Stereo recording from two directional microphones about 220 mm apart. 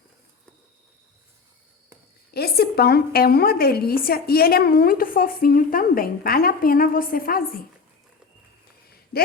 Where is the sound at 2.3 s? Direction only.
45° left (ahead or behind).